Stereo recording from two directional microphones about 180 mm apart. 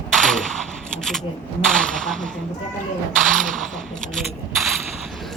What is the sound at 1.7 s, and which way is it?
Speech, 5° left (ahead or behind).